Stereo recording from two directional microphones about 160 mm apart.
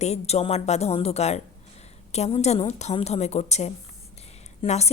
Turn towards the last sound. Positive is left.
turn(degrees=45)  # may be behind; listen again after turning